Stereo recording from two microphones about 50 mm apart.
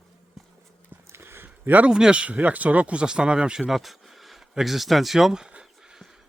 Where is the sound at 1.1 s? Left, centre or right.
Right.